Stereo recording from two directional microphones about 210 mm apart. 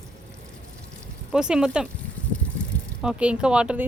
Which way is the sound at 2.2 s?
5° left (ahead or behind).